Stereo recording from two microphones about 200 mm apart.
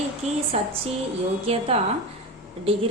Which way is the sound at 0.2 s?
30° right (ahead or behind).